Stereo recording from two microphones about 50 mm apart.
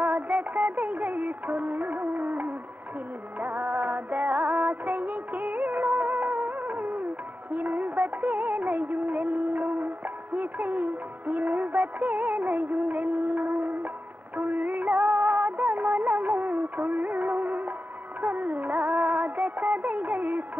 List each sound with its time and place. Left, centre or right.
0.0 s music: right
7.5 s music of bollywood: right
14.3 s music: right